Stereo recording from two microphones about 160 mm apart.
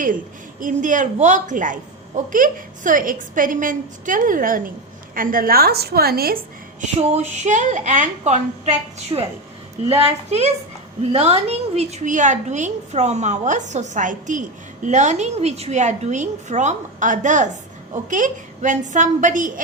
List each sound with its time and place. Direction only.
0.6 s a woman's voice: 55° right (ahead or behind); by 6.4 s 70° right (ahead or behind)
7.0 s a woman's voice: 45° right (ahead or behind)
9.1 s a woman's voice: 30° right (ahead or behind)
10.2 s a woman's voice: 40° right (ahead or behind)